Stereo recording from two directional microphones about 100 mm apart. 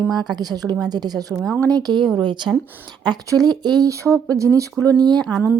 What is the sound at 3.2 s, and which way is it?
Speech, 40° right (ahead or behind).